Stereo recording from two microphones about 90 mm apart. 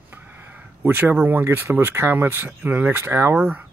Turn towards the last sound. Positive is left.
turn(degrees=-25)  # may be behind; listen again after turning